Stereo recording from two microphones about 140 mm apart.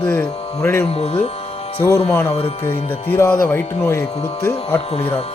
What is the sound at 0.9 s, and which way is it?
Speech, 45° left (ahead or behind).